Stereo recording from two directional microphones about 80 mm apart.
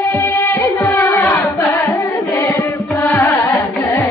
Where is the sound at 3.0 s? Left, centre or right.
Left.